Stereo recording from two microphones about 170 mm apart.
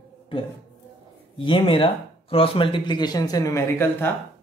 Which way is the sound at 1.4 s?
30° left (ahead or behind).